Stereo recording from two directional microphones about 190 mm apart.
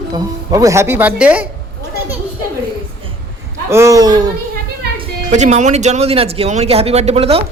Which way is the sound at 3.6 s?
15° right (ahead or behind).